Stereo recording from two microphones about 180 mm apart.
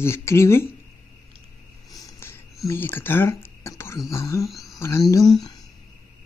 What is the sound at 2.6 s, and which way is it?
Speech, 15° left (ahead or behind).